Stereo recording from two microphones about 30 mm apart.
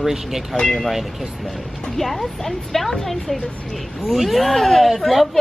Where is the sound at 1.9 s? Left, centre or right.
Centre.